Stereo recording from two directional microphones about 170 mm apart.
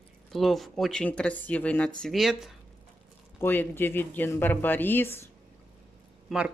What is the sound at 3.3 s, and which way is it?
Speech, 10° left (ahead or behind).